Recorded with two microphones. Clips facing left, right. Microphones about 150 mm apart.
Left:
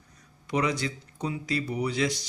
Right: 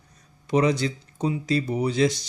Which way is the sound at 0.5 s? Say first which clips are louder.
Right 6 dB; 25° right (ahead or behind).